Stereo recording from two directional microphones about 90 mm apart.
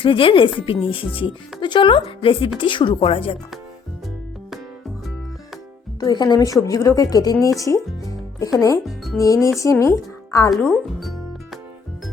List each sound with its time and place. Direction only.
0.0 s a woman's voice: 75° left (ahead or behind)
0.6 s speech: 85° left
1.6 s a woman's voice: 65° left (ahead or behind); by 2.5 s 85° left
2.6 s speech: 65° left (ahead or behind); by 3.3 s 90° left
6.0 s speech: 50° left (ahead or behind)
6.4 s speech: 40° left (ahead or behind)
7.6 s music: 35° left (ahead or behind)
8.5 s speech: 40° left (ahead or behind)